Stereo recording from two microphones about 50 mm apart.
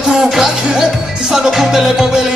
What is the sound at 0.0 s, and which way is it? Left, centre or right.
Music, centre.